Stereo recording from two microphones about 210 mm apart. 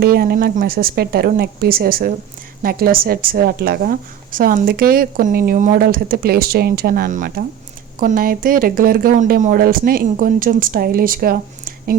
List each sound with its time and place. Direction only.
0.0 s speech: 45° right (ahead or behind)